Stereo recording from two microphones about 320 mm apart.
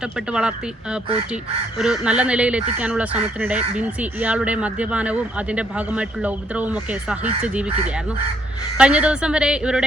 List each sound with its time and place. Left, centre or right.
0.3 s speech: centre
8.8 s speech: centre